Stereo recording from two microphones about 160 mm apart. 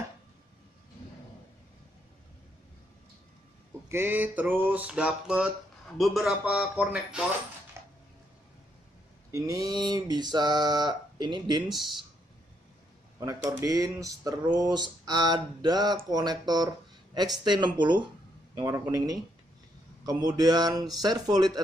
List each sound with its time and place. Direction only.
3.9 s a sound: 15° right (ahead or behind)
5.9 s a man's voice: centre (ahead or behind)
7.8 s dishes: 15° right (ahead or behind)
9.3 s speech: 20° right (ahead or behind)
13.2 s speech: 20° right (ahead or behind)